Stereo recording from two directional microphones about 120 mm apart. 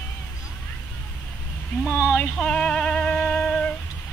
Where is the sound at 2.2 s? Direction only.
10° left (ahead or behind).